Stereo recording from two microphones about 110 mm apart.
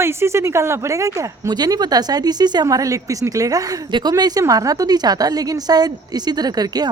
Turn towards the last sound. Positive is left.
turn(degrees=-35)  # may be behind; listen again after turning